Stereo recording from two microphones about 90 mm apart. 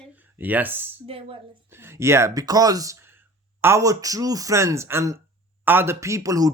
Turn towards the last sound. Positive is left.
turn(degrees=-40)  # may be behind; listen again after turning